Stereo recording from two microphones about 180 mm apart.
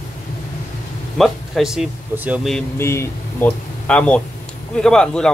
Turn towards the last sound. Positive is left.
turn(degrees=5)  # may be behind; listen again after turning